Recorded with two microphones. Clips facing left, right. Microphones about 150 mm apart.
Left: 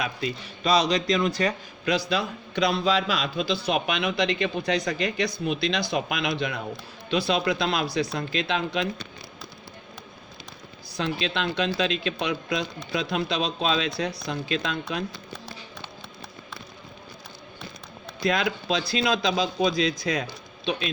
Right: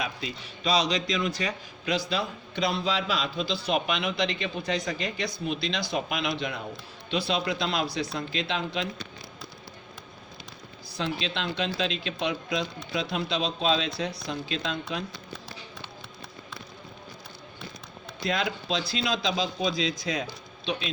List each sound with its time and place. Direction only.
0.0 s a man's voice: 55° left (ahead or behind)
10.9 s speech: 60° left (ahead or behind)
18.2 s speech: 65° left (ahead or behind)